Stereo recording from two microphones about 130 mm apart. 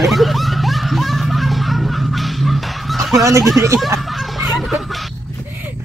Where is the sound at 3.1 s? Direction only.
25° right (ahead or behind).